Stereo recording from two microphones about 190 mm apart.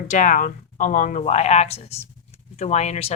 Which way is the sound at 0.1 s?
40° left (ahead or behind).